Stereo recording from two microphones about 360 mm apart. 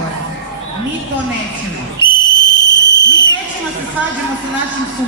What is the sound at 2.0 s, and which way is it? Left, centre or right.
Whistle, centre.